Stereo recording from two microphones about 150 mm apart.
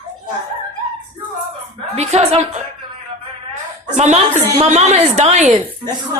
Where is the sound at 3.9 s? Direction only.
50° right (ahead or behind).